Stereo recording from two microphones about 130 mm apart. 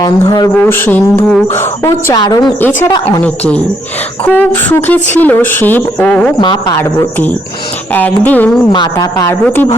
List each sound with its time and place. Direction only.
0.0 s speech: 30° left (ahead or behind)
0.5 s speech: 15° left (ahead or behind)
2.1 s speech: 35° left (ahead or behind)
2.8 s speech: 10° left (ahead or behind)
6.4 s speech: 35° left (ahead or behind)
6.7 s speech: 20° left (ahead or behind)
8.7 s speech: 35° left (ahead or behind)